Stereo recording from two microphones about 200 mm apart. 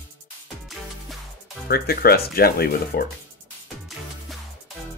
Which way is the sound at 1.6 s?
50° left (ahead or behind).